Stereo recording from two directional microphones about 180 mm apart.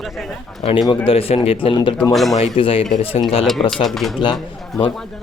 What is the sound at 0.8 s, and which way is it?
Speech, 30° left (ahead or behind).